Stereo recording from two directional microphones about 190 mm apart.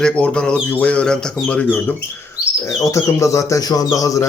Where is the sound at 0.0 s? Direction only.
5° left (ahead or behind).